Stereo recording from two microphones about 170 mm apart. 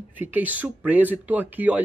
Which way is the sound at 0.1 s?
10° right (ahead or behind).